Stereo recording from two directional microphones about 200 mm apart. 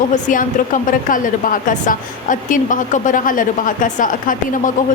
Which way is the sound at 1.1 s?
40° left (ahead or behind).